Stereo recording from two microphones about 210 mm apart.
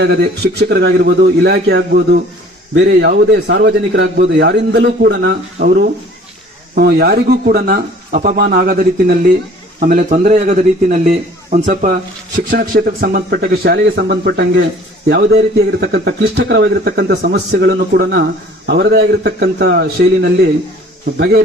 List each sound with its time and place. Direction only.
0.0 s speech: 50° right (ahead or behind)